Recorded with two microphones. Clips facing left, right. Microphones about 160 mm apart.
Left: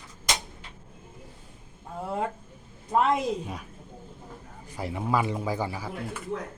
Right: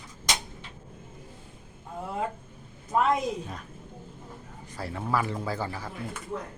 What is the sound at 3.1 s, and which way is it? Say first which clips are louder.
Speech: left 1 dB; 10° left (ahead or behind).